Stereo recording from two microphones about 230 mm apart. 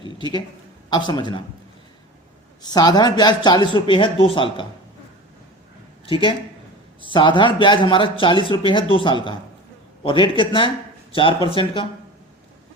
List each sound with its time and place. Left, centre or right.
0.0 s a sound: centre
0.9 s speech: centre
2.6 s speech: centre
6.1 s speech: left